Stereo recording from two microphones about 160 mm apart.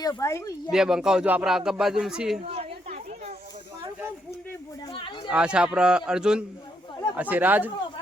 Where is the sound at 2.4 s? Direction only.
40° right (ahead or behind).